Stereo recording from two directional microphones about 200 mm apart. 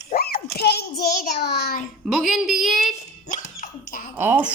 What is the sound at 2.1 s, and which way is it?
Speech, centre (ahead or behind).